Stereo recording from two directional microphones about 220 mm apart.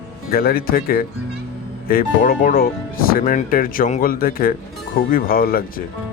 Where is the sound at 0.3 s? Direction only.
45° left (ahead or behind).